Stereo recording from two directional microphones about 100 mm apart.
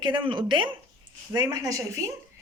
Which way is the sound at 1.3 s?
40° right (ahead or behind).